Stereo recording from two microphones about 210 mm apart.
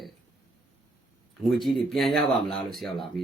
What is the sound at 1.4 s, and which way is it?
Speech, centre (ahead or behind).